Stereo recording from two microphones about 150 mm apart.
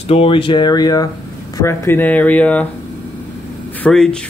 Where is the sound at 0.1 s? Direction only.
40° left (ahead or behind).